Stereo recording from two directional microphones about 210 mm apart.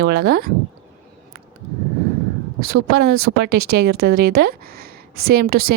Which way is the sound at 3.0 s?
45° right (ahead or behind).